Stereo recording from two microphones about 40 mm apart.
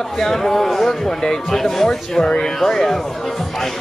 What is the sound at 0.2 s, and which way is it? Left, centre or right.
Speech, centre.